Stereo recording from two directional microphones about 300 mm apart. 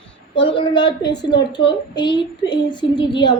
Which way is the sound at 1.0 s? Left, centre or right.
Left.